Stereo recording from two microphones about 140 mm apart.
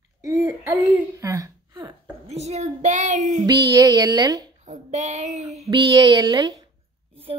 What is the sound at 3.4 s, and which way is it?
Speech, 30° right (ahead or behind).